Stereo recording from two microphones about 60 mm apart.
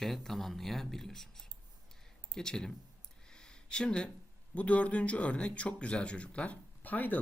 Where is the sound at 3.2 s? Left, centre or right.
Centre.